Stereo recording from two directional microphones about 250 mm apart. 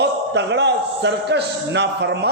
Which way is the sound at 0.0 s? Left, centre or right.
Right.